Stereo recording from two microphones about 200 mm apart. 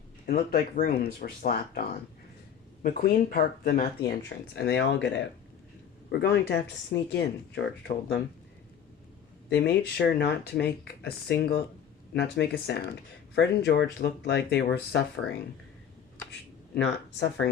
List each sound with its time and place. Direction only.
0.3 s speech: 45° left (ahead or behind)
2.8 s speech: 45° left (ahead or behind)
9.5 s speech: 55° left (ahead or behind)
16.7 s speech: 60° left (ahead or behind)